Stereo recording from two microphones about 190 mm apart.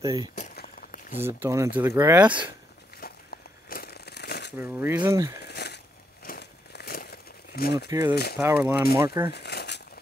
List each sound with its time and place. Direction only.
0.0 s speech: 20° right (ahead or behind)
3.0 s crumpling: 50° left (ahead or behind)
4.6 s speech: 10° right (ahead or behind)
5.5 s a sound: 60° left (ahead or behind)
6.2 s crumpling: 55° left (ahead or behind)
8.1 s speech: 55° left (ahead or behind)
8.4 s speech: 10° right (ahead or behind)
9.3 s crumpling: 60° left (ahead or behind)